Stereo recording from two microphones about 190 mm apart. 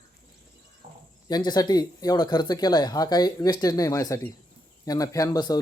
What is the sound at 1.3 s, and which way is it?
Speech, 20° left (ahead or behind).